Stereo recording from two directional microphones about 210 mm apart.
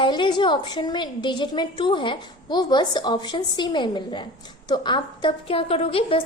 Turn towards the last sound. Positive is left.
turn(degrees=25)  # may be behind; listen again after turning